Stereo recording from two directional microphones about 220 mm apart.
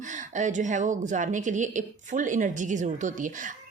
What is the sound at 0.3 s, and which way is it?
A woman's voice, 35° right (ahead or behind).